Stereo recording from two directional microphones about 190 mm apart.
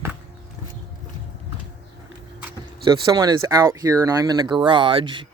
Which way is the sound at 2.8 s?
25° right (ahead or behind).